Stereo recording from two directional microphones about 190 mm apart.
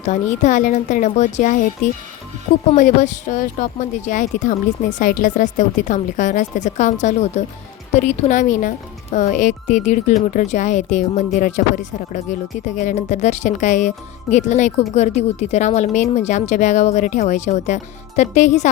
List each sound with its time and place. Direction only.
0.0 s speech: 40° left (ahead or behind)